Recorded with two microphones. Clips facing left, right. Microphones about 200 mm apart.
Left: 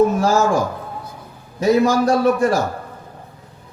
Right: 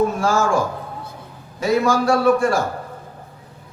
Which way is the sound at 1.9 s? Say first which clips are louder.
Left 1 dB; 20° left (ahead or behind).